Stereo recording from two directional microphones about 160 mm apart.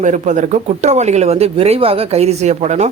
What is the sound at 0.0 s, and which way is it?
Speech, 50° right (ahead or behind).